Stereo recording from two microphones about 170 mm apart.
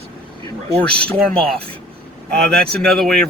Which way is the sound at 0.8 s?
5° left (ahead or behind).